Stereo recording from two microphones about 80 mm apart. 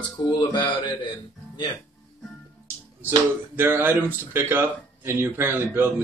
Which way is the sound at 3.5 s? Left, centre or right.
Right.